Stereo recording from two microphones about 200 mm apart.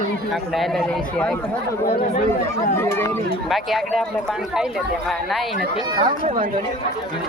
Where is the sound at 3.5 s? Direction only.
Centre (ahead or behind).